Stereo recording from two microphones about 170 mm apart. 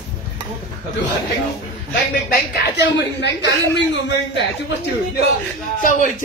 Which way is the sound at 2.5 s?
85° left.